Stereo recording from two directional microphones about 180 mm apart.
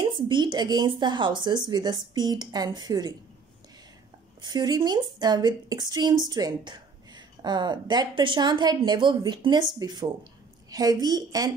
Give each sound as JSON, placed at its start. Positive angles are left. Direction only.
{"t": 0.0, "sound": "a woman's voice", "side_deg": -25}
{"t": 4.4, "sound": "a woman's voice", "side_deg": -25}